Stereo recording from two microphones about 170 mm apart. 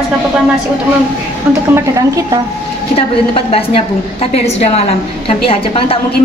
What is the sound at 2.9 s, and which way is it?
A woman's voice, 35° left (ahead or behind).